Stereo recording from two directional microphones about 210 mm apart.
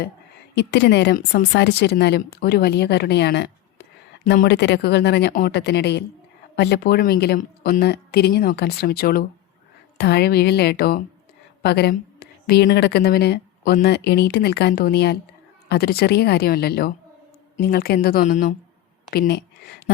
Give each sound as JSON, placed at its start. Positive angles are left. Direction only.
{"t": 0.5, "sound": "a woman's voice", "side_deg": 55}
{"t": 19.1, "sound": "speech", "side_deg": 50}